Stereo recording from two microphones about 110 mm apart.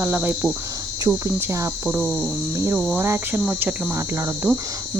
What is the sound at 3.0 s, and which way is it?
Speech, 20° right (ahead or behind).